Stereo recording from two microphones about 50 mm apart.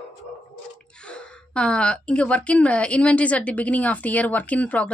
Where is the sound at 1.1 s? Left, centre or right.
Left.